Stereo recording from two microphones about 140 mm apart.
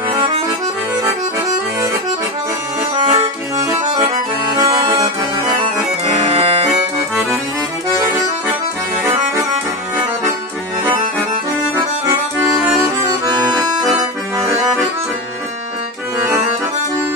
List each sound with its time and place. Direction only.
3.0 s accordion: 45° right (ahead or behind)
4.6 s accordion: 30° right (ahead or behind)